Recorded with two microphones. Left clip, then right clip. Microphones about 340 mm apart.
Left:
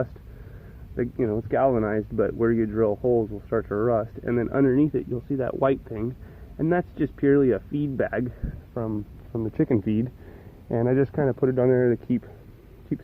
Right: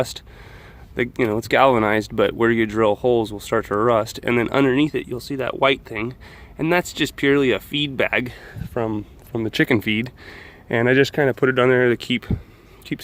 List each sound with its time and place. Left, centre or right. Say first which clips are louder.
0.9 s speech: right 5 dB; right
8.7 s speech: right 7 dB; right
9.8 s speech: right 5 dB; centre
10.7 s speech: right 6 dB; right